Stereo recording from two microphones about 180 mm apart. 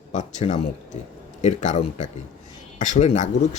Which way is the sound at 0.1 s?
40° left (ahead or behind).